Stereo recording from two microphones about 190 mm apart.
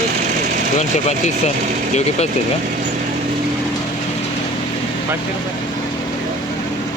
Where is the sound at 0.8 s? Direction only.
35° left (ahead or behind).